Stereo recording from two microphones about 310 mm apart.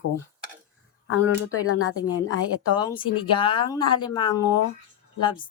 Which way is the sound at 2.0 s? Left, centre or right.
Centre.